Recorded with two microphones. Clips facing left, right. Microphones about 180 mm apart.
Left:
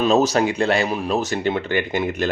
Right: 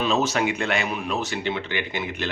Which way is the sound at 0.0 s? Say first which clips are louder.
Left 6 dB; 40° left (ahead or behind).